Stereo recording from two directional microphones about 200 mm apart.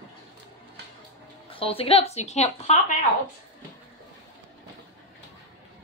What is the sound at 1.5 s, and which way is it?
A woman's voice, 25° left (ahead or behind).